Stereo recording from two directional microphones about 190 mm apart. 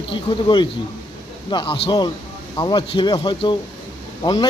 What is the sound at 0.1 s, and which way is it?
A man's voice, 25° left (ahead or behind).